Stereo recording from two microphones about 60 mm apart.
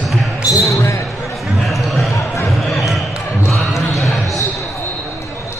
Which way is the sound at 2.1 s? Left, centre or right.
Left.